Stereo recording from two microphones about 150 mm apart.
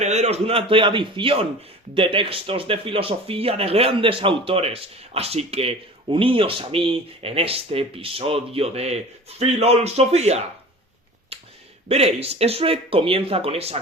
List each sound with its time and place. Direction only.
0.0 s speech: 50° right (ahead or behind)
11.3 s a sound: 40° right (ahead or behind)
11.9 s speech: 45° right (ahead or behind)